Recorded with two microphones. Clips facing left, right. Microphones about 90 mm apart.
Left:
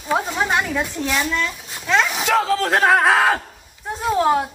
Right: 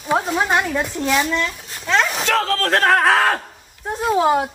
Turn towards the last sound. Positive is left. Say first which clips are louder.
# right 1 dB
turn(degrees=0)  # may be behind; listen again after turning